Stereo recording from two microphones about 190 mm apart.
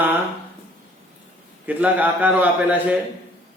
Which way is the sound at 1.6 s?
10° right (ahead or behind).